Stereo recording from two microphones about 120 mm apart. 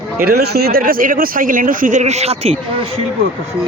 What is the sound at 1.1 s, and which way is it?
Speech, 90° right.